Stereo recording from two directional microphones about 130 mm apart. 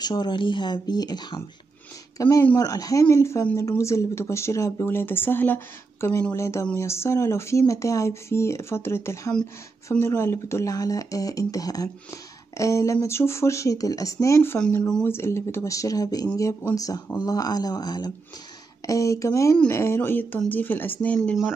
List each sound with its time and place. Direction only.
0.0 s speech: 35° left (ahead or behind)
14.8 s speech: 5° left (ahead or behind)
15.0 s speech: 20° left (ahead or behind)